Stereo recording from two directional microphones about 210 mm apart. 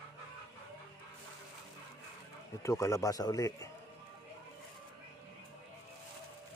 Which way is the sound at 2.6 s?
15° left (ahead or behind).